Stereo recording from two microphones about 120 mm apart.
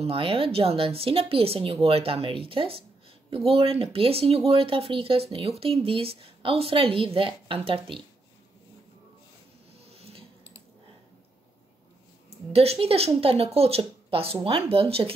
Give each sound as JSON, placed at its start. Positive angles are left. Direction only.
{"t": 0.0, "sound": "speech", "side_deg": -50}
{"t": 9.8, "sound": "a sound", "side_deg": -55}
{"t": 12.5, "sound": "speech", "side_deg": -55}